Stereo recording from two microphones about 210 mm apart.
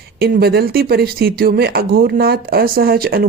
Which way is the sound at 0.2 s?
45° right (ahead or behind).